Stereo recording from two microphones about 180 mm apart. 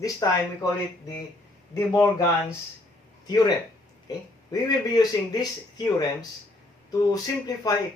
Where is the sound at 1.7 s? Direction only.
15° left (ahead or behind).